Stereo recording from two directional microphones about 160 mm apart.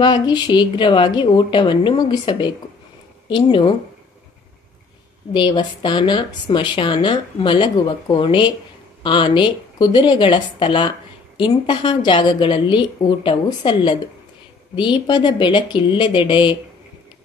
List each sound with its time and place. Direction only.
0.0 s a woman's voice: 30° left (ahead or behind)
5.3 s speech: 30° left (ahead or behind)